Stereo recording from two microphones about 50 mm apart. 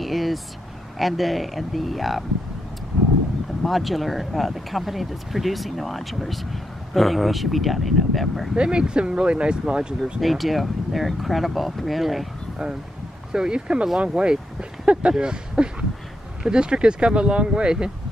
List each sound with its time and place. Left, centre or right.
0.0 s vehicle: centre
0.9 s speech: centre
3.6 s speech: centre
8.5 s speech: centre
10.2 s speech: centre
13.3 s speech: centre